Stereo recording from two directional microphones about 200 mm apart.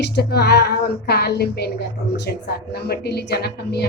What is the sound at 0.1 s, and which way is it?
A woman's voice, 55° left (ahead or behind).